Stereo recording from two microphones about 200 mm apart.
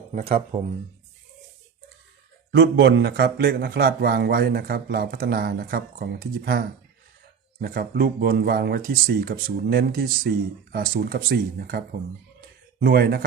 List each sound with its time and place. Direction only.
0.1 s speech: 30° right (ahead or behind)
2.5 s speech: 60° right (ahead or behind)
12.4 s a sound: 50° right (ahead or behind)